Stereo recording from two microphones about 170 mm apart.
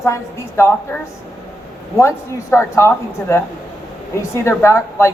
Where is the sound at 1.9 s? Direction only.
15° left (ahead or behind).